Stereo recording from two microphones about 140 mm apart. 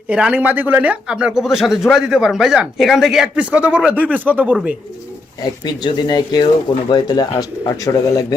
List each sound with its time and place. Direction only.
0.1 s speech: 10° right (ahead or behind)
5.4 s speech: 30° left (ahead or behind)